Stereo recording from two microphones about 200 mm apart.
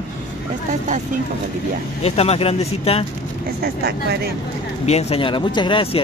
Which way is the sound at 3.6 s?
55° right (ahead or behind).